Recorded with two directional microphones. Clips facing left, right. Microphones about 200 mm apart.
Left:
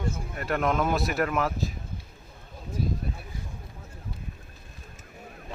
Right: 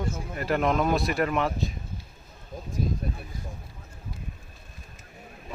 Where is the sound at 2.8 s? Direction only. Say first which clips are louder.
Right 1 dB; 45° right (ahead or behind).